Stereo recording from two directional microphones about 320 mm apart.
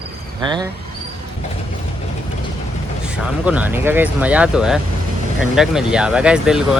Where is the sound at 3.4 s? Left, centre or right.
Centre.